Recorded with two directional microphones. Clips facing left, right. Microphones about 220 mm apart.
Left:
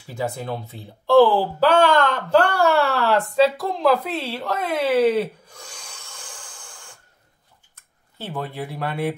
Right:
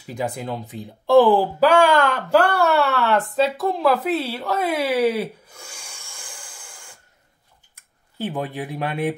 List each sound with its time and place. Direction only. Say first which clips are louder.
0.0 s speech: right 1 dB; 15° right (ahead or behind)